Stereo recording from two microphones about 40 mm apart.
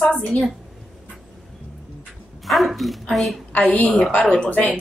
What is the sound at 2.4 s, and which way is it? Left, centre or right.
Speech, centre.